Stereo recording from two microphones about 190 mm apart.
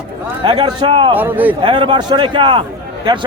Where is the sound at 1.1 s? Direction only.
10° right (ahead or behind).